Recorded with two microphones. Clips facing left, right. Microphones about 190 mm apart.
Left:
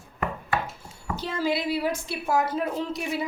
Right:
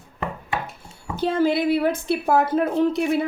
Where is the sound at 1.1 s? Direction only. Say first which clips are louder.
Right 7 dB; 55° right (ahead or behind).